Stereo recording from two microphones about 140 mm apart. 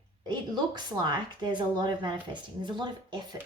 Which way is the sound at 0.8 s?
30° right (ahead or behind).